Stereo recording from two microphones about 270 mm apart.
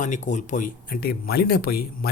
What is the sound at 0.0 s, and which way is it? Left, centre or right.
Speech, left.